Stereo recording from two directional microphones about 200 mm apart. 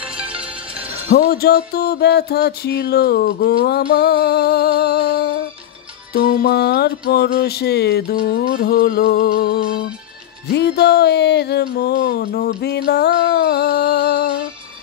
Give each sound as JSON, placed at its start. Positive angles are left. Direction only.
{"t": 1.0, "sound": "music", "side_deg": 50}
{"t": 10.5, "sound": "speech", "side_deg": 55}